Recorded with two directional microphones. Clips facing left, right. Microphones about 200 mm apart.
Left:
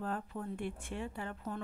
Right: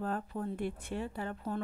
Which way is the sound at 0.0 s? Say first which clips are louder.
Right 3 dB; 40° right (ahead or behind).